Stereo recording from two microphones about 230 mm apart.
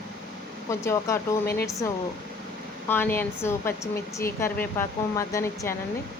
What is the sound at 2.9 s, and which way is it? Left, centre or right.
Speech, centre.